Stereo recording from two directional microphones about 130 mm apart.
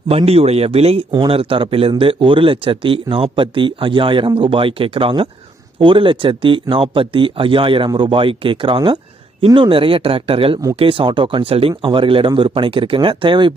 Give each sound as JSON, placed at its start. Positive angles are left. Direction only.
{"t": 0.3, "sound": "speech", "side_deg": -50}